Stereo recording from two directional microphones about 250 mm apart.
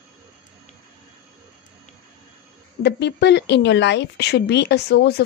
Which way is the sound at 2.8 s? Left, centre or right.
Left.